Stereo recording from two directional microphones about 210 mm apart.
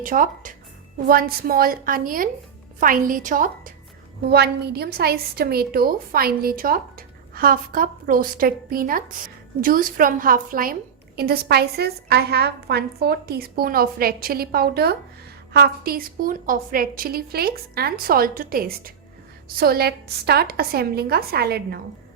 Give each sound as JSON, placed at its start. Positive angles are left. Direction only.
{"t": 0.0, "sound": "a woman's voice", "side_deg": -40}
{"t": 4.3, "sound": "a woman's voice", "side_deg": -50}